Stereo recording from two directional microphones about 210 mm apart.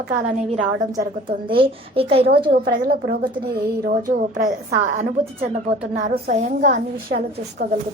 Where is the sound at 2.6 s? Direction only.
45° right (ahead or behind).